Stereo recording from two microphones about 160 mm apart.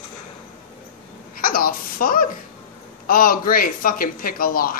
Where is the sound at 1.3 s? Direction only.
60° left (ahead or behind).